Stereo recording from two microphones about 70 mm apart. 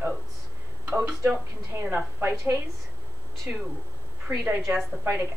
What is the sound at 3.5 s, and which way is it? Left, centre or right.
A woman's voice, right.